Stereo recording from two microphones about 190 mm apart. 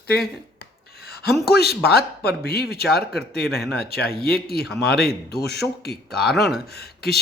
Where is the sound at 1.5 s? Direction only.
55° left (ahead or behind).